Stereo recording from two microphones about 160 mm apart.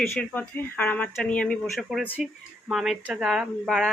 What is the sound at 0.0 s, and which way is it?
Speech, 10° left (ahead or behind).